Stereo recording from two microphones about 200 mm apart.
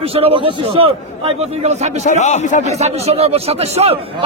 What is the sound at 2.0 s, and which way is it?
Speech, 35° left (ahead or behind).